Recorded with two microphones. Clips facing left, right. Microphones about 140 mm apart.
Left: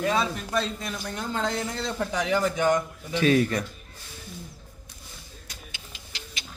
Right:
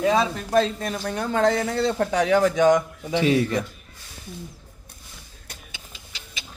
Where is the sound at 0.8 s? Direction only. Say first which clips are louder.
Right 6 dB; 60° right (ahead or behind); by 3.2 s 90° right.